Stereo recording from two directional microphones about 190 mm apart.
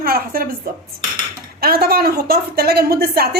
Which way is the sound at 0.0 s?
50° right (ahead or behind).